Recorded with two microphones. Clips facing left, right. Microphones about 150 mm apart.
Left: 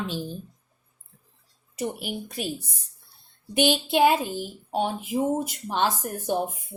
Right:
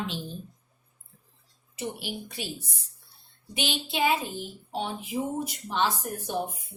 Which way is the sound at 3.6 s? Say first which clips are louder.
Left 8 dB; 50° left (ahead or behind).